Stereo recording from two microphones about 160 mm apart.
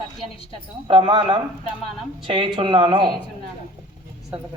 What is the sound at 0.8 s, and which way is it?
Speech, 30° right (ahead or behind).